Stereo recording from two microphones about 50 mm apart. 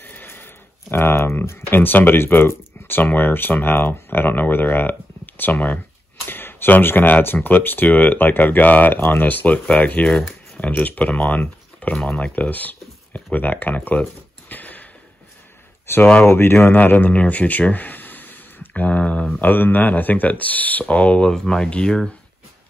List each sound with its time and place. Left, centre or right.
0.0 s a sound: left
0.9 s speech: left
6.2 s speech: left
14.0 s speech: centre
14.5 s sniff: left
15.9 s speech: left
16.7 s speech: left
19.5 s speech: left
21.3 s speech: centre